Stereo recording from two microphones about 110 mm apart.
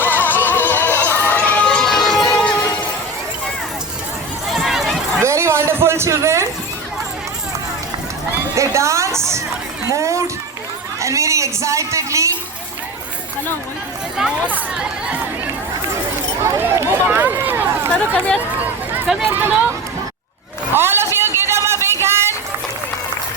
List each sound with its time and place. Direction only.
0.0 s music: 15° left (ahead or behind)
4.5 s run: centre (ahead or behind)
5.2 s a sound: 25° right (ahead or behind)
8.3 s a sound: 25° right (ahead or behind)
14.5 s speech: 10° right (ahead or behind)
16.4 s run: 25° right (ahead or behind)
17.8 s speech: 10° left (ahead or behind)
19.3 s speech: 20° right (ahead or behind)
20.7 s a sound: 20° right (ahead or behind)